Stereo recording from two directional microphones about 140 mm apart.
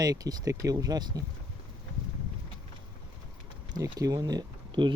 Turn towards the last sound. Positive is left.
turn(degrees=-30)  # may be behind; listen again after turning